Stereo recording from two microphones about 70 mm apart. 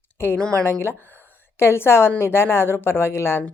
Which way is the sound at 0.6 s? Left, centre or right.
Left.